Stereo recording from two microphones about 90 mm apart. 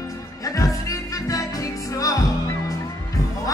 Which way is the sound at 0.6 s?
40° left (ahead or behind).